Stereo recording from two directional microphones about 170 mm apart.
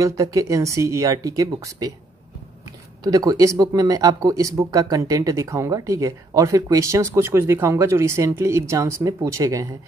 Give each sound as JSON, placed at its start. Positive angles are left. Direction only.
{"t": 0.0, "sound": "speech", "side_deg": -20}
{"t": 3.0, "sound": "speech", "side_deg": -20}